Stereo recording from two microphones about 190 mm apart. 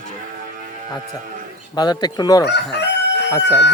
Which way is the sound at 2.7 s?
65° left (ahead or behind).